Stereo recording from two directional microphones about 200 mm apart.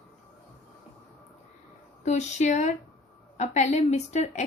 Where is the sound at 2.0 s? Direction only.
35° left (ahead or behind).